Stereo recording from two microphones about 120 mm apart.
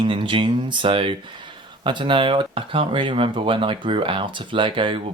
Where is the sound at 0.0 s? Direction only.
45° right (ahead or behind).